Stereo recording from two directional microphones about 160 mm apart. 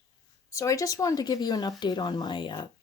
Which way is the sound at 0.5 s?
20° left (ahead or behind).